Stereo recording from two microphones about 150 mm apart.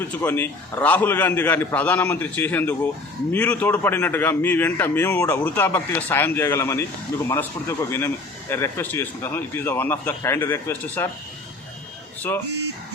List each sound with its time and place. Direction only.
0.0 s a man's voice: 15° left (ahead or behind)